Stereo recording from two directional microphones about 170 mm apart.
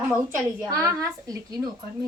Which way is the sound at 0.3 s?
10° right (ahead or behind).